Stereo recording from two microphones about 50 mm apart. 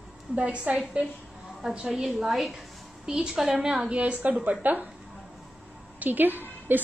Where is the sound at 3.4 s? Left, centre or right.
Right.